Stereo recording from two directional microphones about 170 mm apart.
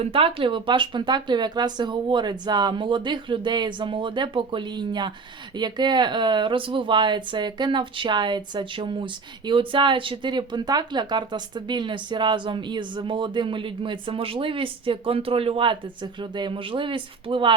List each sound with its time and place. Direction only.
0.0 s speech: 35° right (ahead or behind)